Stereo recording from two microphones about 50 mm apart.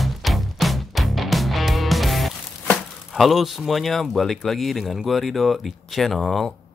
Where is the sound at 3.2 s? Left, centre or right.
Centre.